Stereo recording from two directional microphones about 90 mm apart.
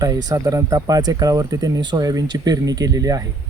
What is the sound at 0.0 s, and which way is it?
Speech, 45° right (ahead or behind).